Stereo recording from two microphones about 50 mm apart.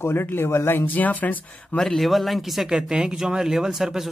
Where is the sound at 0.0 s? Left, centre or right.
Left.